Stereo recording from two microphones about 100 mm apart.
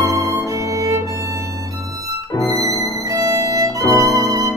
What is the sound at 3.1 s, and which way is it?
Violin, 35° right (ahead or behind).